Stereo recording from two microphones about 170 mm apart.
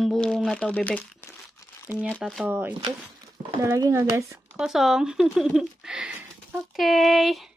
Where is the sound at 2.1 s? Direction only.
Centre (ahead or behind).